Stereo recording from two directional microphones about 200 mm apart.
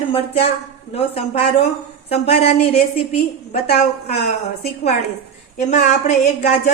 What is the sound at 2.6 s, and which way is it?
Speech, 30° left (ahead or behind).